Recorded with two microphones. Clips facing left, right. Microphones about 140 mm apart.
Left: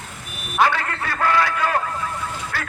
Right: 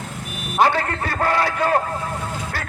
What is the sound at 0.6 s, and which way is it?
A man's voice, 35° right (ahead or behind).